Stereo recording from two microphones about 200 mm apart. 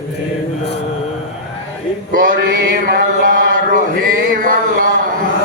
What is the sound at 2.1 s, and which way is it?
Mantra, 45° right (ahead or behind).